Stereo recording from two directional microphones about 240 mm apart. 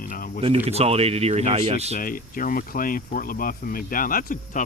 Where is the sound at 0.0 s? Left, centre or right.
Left.